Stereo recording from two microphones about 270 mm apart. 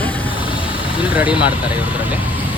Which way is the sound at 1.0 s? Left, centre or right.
Centre.